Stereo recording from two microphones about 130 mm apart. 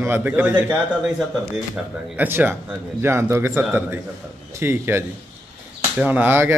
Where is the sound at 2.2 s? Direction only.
15° right (ahead or behind).